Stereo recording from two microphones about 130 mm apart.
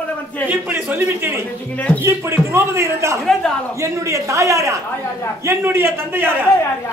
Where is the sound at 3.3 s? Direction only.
5° left (ahead or behind).